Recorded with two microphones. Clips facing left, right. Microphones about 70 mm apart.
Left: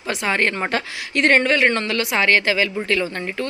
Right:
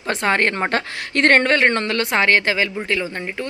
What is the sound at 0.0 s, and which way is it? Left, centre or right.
A woman's voice, right.